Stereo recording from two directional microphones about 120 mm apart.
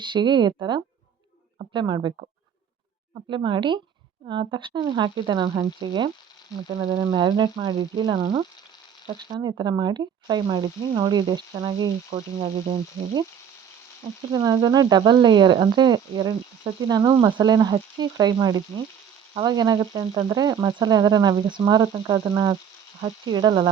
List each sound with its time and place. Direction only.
0.0 s speech: 40° right (ahead or behind)
3.2 s sizzle: 45° right (ahead or behind)
4.3 s speech: 45° right (ahead or behind)
12.1 s speech: 65° right (ahead or behind)
14.3 s speech: 35° right (ahead or behind)
23.0 s sizzle: 45° right (ahead or behind)